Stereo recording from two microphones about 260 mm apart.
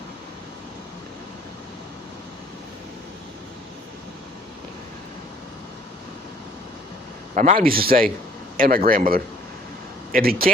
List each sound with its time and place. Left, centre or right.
7.3 s speech: right